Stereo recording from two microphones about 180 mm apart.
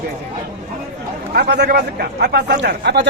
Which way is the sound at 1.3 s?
65° right (ahead or behind).